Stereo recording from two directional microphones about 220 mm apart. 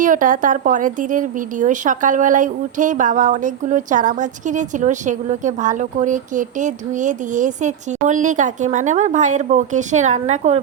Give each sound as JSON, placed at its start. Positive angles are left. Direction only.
{"t": 0.0, "sound": "speech", "side_deg": -35}